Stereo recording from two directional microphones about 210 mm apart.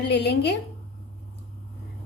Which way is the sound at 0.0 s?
55° left (ahead or behind).